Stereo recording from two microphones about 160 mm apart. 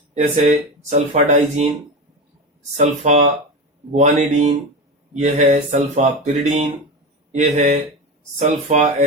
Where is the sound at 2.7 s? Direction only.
50° right (ahead or behind).